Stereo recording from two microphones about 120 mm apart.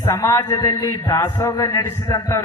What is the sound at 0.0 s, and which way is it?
A man's voice, 25° left (ahead or behind).